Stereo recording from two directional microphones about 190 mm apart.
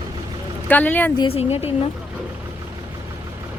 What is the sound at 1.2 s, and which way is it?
Speech, 30° left (ahead or behind).